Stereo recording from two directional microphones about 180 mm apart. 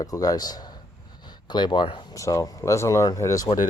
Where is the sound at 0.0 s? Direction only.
20° left (ahead or behind).